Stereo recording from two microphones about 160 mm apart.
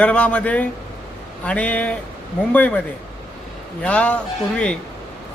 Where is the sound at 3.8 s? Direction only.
10° left (ahead or behind).